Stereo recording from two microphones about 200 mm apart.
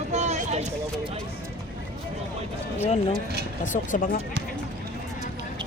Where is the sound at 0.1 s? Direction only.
35° right (ahead or behind).